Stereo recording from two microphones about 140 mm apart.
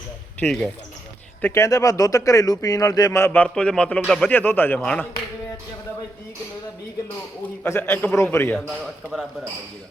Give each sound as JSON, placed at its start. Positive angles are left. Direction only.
{"t": 0.3, "sound": "speech", "side_deg": 0}
{"t": 1.4, "sound": "a man's voice", "side_deg": 15}
{"t": 7.6, "sound": "a man's voice", "side_deg": 15}